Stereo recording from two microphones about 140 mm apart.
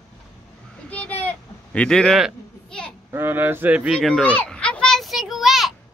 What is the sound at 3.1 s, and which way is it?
Speech, 15° right (ahead or behind).